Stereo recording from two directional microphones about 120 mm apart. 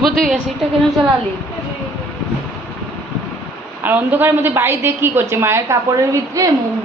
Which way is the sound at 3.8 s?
15° right (ahead or behind).